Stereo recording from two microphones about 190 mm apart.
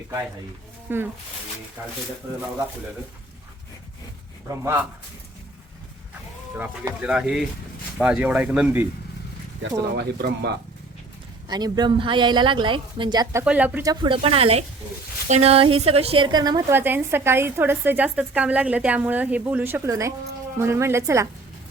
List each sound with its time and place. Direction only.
0.9 s a woman's voice: 10° right (ahead or behind)
4.4 s a woman's voice: 15° right (ahead or behind)
6.6 s a woman's voice: 5° right (ahead or behind)
10.0 s speech: 60° right (ahead or behind)
11.4 s a woman's voice: 20° right (ahead or behind)
13.4 s a woman's voice: 5° right (ahead or behind)
13.8 s a woman's voice: 25° right (ahead or behind)